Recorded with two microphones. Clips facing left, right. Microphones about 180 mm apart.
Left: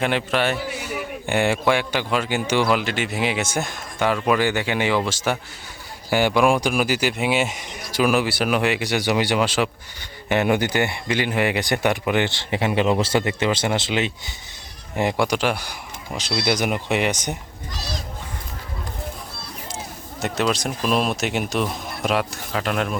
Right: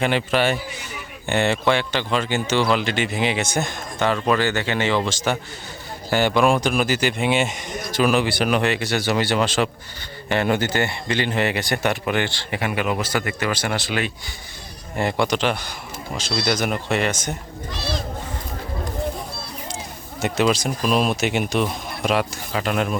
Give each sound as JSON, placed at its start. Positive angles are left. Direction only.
{"t": 0.0, "sound": "a man's voice", "side_deg": 0}
{"t": 14.9, "sound": "speech", "side_deg": 10}
{"t": 20.2, "sound": "speech", "side_deg": 0}